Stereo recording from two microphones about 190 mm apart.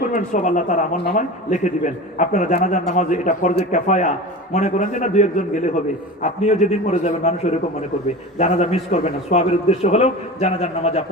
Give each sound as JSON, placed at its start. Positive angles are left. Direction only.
{"t": 0.1, "sound": "a man's voice", "side_deg": 40}